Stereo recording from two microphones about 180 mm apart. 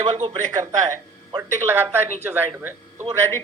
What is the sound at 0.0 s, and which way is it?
Speech, 20° right (ahead or behind).